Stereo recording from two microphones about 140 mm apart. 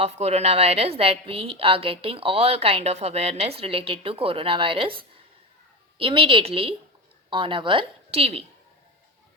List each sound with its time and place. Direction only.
0.0 s a woman's voice: 50° right (ahead or behind)